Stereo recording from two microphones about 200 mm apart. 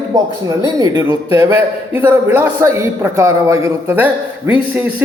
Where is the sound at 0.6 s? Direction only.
20° right (ahead or behind).